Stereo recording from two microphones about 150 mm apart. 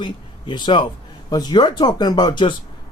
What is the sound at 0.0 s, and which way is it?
A man's voice, 30° left (ahead or behind).